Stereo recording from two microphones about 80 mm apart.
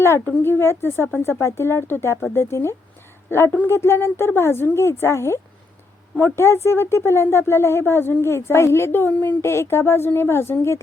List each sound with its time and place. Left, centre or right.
0.0 s speech: left